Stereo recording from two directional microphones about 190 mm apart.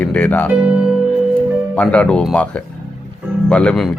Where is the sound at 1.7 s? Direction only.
5° left (ahead or behind).